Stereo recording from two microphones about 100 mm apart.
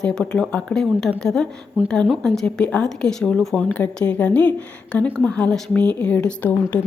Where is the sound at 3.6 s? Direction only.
15° left (ahead or behind).